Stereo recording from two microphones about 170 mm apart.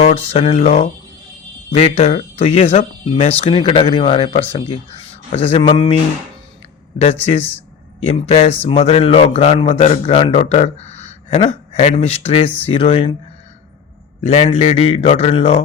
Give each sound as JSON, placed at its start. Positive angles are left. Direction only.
{"t": 0.3, "sound": "speech", "side_deg": 35}
{"t": 7.3, "sound": "speech", "side_deg": 35}
{"t": 14.3, "sound": "speech", "side_deg": 40}